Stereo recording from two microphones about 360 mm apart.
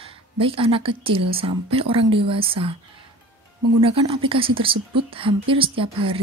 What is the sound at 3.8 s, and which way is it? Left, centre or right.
A woman's voice, centre.